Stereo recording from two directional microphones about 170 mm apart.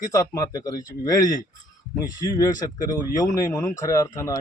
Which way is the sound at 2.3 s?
20° left (ahead or behind).